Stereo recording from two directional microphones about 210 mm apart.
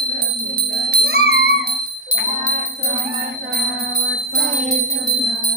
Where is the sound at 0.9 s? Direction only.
50° right (ahead or behind).